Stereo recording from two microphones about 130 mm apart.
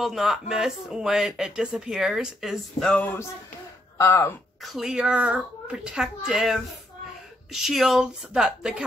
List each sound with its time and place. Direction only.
0.0 s speech: centre (ahead or behind)
4.0 s speech: 20° left (ahead or behind)
4.6 s speech: centre (ahead or behind)